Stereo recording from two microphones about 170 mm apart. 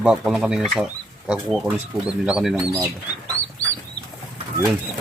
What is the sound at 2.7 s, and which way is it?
Speech, 15° right (ahead or behind).